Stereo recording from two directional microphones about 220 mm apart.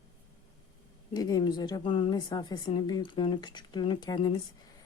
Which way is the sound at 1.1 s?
15° left (ahead or behind).